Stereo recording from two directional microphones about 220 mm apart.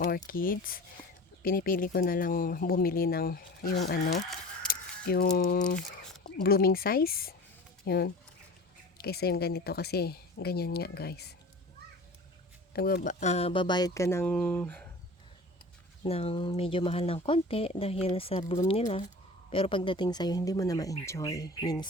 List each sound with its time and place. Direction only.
0.3 s speech: 40° left (ahead or behind)
4.1 s fowl: centre (ahead or behind)
4.7 s a woman's voice: 40° left (ahead or behind)
12.7 s speech: 45° left (ahead or behind); by 14.8 s 5° left (ahead or behind)
16.0 s speech: 25° left (ahead or behind)